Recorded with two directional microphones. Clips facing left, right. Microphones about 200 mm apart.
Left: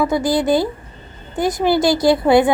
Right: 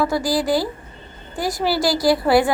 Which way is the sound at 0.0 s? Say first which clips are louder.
Left 3 dB; 20° left (ahead or behind).